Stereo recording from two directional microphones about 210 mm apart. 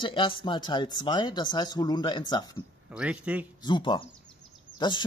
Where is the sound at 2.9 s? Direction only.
5° right (ahead or behind).